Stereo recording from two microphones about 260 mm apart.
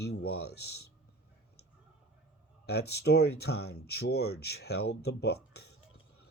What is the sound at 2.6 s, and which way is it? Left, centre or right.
Speech, left.